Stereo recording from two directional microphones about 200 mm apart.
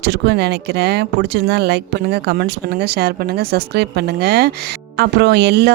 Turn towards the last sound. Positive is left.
turn(degrees=-55)  # may be behind; listen again after turning